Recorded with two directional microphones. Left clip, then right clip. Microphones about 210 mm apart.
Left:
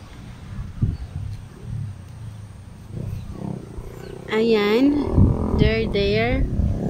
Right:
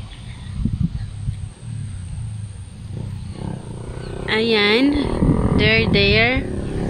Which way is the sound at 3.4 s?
55° left (ahead or behind).